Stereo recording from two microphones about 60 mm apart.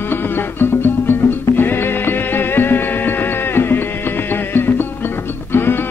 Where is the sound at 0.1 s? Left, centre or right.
Left.